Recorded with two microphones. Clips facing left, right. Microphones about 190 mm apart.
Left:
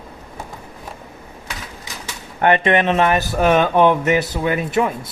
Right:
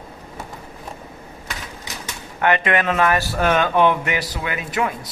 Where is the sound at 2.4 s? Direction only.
30° left (ahead or behind).